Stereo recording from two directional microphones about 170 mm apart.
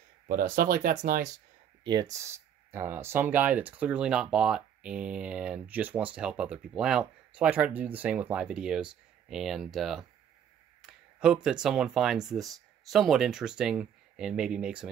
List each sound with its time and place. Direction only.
0.3 s speech: 55° right (ahead or behind)
1.9 s speech: 20° right (ahead or behind); by 14.9 s 5° right (ahead or behind)